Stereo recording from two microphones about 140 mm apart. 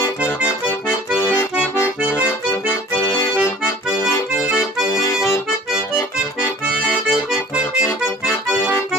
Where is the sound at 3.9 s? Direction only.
15° left (ahead or behind).